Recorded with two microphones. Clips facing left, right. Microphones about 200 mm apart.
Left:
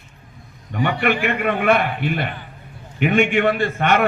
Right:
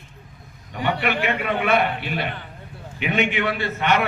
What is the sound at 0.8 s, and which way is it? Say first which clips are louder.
A man's voice: left 3 dB; 55° left (ahead or behind).